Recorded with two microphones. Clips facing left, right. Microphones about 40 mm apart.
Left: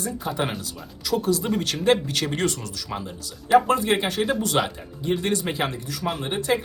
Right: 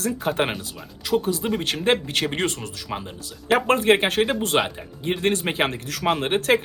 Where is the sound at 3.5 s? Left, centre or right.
Right.